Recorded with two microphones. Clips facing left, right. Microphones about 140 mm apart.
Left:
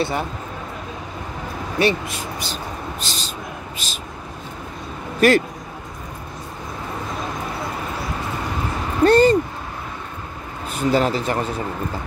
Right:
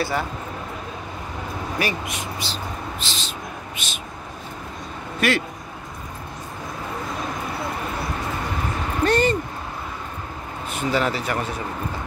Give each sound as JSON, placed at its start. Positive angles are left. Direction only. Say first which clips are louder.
{"t": 0.0, "sound": "speech", "louder": "left 2 dB", "side_deg": 20}
{"t": 1.8, "sound": "speech", "louder": "left 8 dB", "side_deg": 30}
{"t": 3.1, "sound": "a sound", "louder": "left 1 dB", "side_deg": 40}
{"t": 5.2, "sound": "speech", "louder": "left 7 dB", "side_deg": 40}
{"t": 9.0, "sound": "a sound", "louder": "left 7 dB", "side_deg": 35}
{"t": 10.7, "sound": "speech", "louder": "left 4 dB", "side_deg": 35}